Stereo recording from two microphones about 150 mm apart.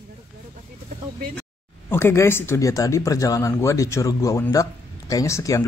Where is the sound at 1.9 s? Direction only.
15° left (ahead or behind).